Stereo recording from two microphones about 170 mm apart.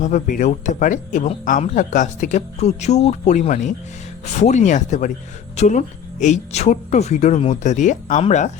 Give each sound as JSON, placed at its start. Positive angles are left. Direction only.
{"t": 0.0, "sound": "speech", "side_deg": 50}